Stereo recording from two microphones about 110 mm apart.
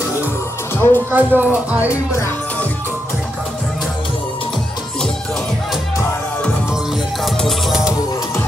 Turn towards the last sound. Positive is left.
turn(degrees=0)  # may be behind; listen again after turning